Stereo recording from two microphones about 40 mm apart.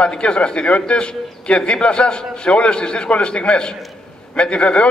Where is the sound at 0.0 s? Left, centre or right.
Left.